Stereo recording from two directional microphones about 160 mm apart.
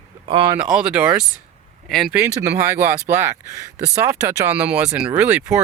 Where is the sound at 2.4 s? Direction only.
20° right (ahead or behind).